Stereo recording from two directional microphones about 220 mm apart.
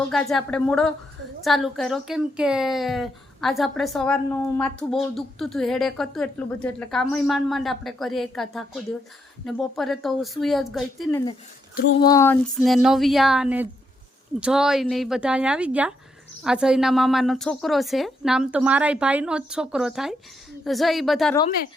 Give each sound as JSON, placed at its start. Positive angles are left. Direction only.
{"t": 0.1, "sound": "a woman's voice", "side_deg": 0}
{"t": 11.9, "sound": "a sound", "side_deg": 15}
{"t": 12.5, "sound": "a woman's voice", "side_deg": 0}